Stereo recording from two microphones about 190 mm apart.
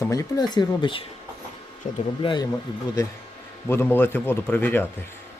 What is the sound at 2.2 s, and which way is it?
Speech, 25° left (ahead or behind).